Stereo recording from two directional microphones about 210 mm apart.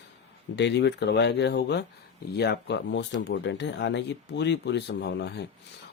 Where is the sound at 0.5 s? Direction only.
55° left (ahead or behind).